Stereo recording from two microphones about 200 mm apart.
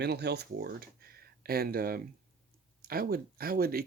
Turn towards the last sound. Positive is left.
turn(degrees=-50)  # may be behind; listen again after turning